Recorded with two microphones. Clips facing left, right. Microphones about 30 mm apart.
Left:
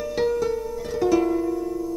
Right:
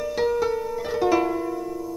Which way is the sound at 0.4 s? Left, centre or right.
Centre.